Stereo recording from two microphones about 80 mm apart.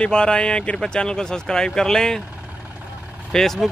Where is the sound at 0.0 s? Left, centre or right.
Centre.